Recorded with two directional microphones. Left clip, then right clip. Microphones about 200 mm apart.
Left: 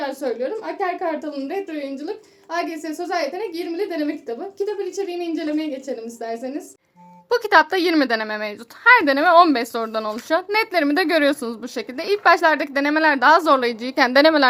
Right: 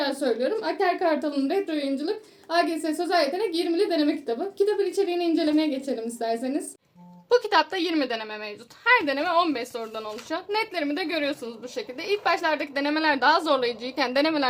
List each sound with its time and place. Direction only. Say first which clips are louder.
0.0 s a woman's voice: left 1 dB; 5° right (ahead or behind)
7.3 s a woman's voice: left 5 dB; 30° left (ahead or behind)